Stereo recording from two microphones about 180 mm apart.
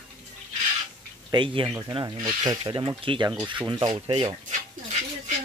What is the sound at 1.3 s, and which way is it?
Speech, 25° right (ahead or behind).